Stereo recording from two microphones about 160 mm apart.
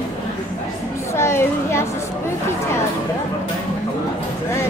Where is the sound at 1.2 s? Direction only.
15° left (ahead or behind).